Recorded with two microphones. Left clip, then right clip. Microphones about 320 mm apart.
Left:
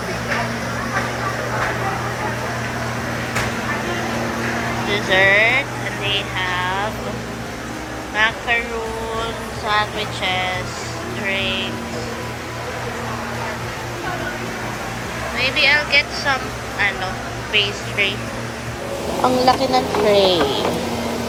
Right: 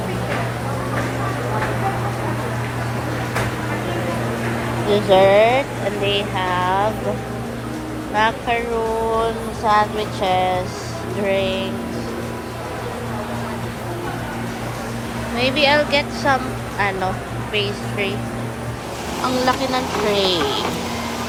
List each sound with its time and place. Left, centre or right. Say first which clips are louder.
4.9 s speech: right 2 dB; centre
6.1 s a sound: left 1 dB; centre
8.1 s speech: even; centre
9.6 s speech: right 3 dB; centre
15.4 s speech: even; centre
19.2 s speech: left 4 dB; centre
20.1 s speech: left 3 dB; centre